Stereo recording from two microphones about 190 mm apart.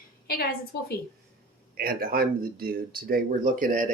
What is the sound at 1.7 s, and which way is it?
Speech, 50° right (ahead or behind).